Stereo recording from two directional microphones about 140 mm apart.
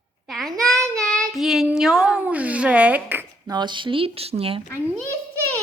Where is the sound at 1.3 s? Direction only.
Centre (ahead or behind).